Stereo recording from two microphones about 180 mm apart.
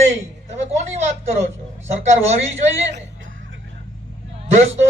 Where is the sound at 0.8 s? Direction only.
40° right (ahead or behind).